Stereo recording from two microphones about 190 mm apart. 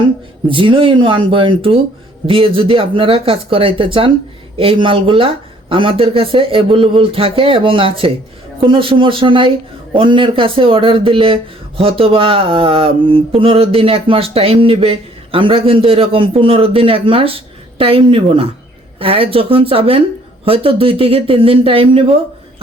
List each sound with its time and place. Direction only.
0.4 s speech: 25° right (ahead or behind)